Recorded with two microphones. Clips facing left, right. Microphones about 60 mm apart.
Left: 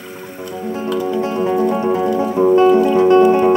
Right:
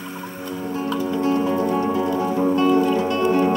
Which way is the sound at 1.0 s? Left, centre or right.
Left.